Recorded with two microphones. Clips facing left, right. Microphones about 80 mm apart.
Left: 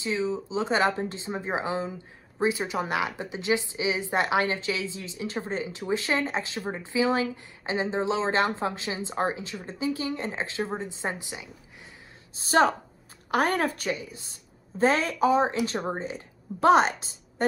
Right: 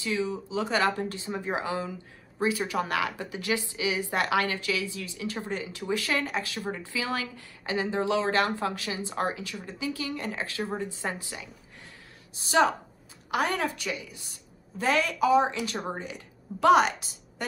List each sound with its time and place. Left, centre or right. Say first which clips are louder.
0.0 s a woman's voice: left 2 dB; left
12.4 s a woman's voice: left 2 dB; left